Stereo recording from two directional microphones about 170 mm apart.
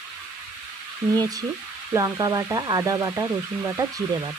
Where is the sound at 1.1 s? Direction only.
20° right (ahead or behind).